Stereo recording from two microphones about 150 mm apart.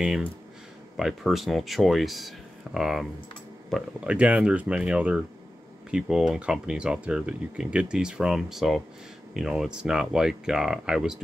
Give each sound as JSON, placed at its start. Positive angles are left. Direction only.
{"t": 0.9, "sound": "speech", "side_deg": 0}